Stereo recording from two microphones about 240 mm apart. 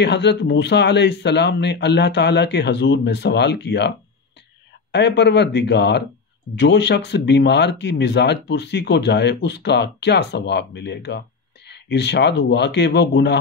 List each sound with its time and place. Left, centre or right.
0.0 s speech: left
4.9 s speech: left